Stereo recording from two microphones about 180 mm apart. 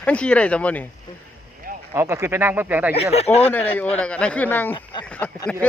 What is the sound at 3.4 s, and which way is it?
A man's voice, 10° left (ahead or behind).